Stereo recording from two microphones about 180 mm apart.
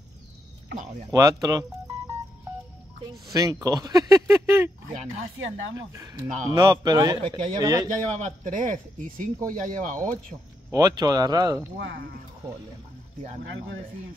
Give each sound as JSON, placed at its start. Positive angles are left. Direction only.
{"t": 1.1, "sound": "speech", "side_deg": -20}
{"t": 3.3, "sound": "speech", "side_deg": -20}
{"t": 5.4, "sound": "speech", "side_deg": -90}
{"t": 5.9, "sound": "speech", "side_deg": -20}
{"t": 7.9, "sound": "a man's voice", "side_deg": -45}
{"t": 10.7, "sound": "speech", "side_deg": -20}
{"t": 11.8, "sound": "speech", "side_deg": -90}